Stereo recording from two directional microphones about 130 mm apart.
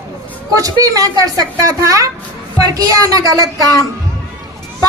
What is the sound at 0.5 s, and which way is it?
A woman's voice, 25° right (ahead or behind).